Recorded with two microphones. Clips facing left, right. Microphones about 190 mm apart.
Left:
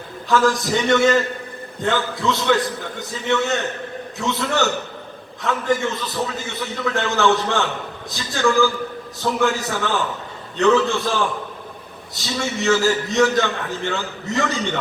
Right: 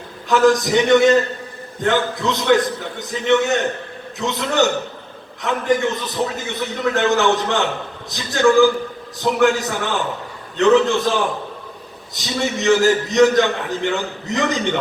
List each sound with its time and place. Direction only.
0.3 s a man's voice: 20° right (ahead or behind)
12.1 s a man's voice: 20° right (ahead or behind)